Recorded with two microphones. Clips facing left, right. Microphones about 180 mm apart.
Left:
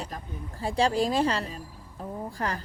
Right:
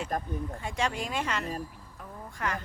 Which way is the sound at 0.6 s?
35° left (ahead or behind).